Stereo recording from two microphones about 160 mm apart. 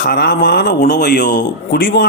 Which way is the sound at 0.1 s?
85° left.